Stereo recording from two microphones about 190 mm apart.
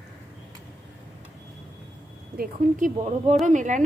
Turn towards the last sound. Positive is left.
turn(degrees=-40)  # may be behind; listen again after turning